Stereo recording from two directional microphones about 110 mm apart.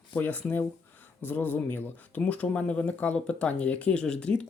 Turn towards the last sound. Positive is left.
turn(degrees=10)  # may be behind; listen again after turning